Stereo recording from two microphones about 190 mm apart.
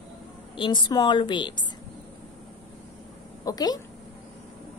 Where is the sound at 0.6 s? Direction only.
25° left (ahead or behind).